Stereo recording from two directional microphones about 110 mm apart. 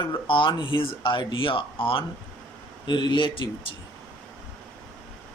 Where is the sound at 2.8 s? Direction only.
45° left (ahead or behind).